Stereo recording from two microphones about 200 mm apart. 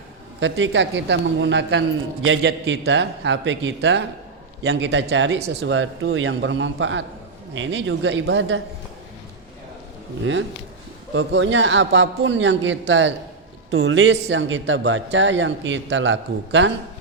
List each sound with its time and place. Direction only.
0.3 s a man's voice: 70° right (ahead or behind)
11.1 s speech: 70° right (ahead or behind)
13.7 s speech: 90° right; by 16.7 s 65° right (ahead or behind)